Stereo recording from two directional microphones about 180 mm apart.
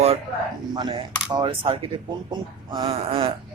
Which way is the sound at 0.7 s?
25° right (ahead or behind).